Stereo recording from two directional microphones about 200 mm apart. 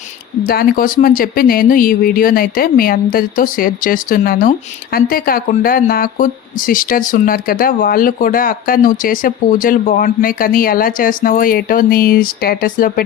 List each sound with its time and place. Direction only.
0.4 s speech: 50° left (ahead or behind)